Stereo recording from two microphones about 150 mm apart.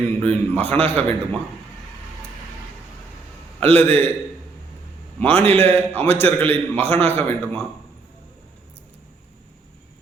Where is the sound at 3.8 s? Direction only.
10° left (ahead or behind).